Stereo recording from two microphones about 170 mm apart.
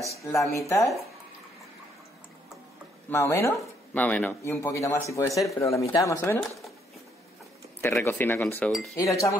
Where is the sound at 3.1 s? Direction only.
15° left (ahead or behind).